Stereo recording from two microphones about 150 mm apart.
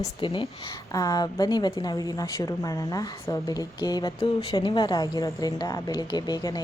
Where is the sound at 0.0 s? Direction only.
35° left (ahead or behind).